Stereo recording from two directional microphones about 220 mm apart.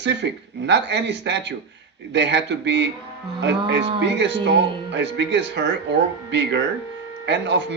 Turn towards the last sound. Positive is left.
turn(degrees=-50)  # may be behind; listen again after turning